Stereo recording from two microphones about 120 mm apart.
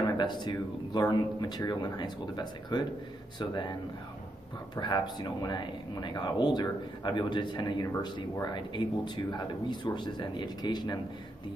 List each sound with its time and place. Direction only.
0.2 s speech: 40° left (ahead or behind)
4.7 s speech: 35° left (ahead or behind)